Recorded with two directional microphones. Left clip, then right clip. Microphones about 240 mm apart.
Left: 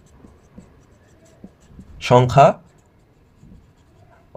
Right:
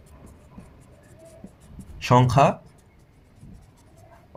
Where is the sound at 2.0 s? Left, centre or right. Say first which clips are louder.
Left 6 dB; left.